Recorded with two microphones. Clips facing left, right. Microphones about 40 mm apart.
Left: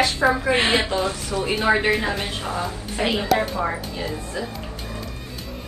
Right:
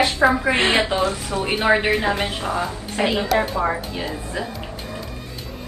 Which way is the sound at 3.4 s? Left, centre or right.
Centre.